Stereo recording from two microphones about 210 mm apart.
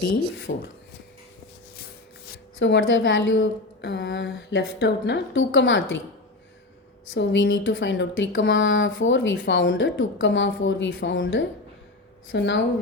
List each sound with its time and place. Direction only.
0.5 s speech: 45° left (ahead or behind)
2.6 s speech: 60° left (ahead or behind)
7.1 s speech: 60° left (ahead or behind)